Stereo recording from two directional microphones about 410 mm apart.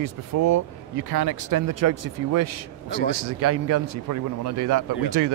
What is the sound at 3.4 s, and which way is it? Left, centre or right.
Speech, right.